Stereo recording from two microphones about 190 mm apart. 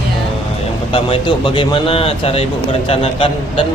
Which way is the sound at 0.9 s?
25° left (ahead or behind).